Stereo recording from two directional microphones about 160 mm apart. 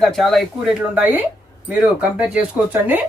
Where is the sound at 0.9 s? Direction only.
10° right (ahead or behind).